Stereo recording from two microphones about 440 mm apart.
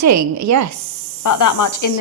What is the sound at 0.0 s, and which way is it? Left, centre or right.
Speech, right.